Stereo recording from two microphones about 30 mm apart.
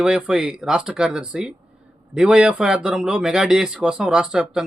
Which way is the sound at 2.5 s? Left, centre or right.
Right.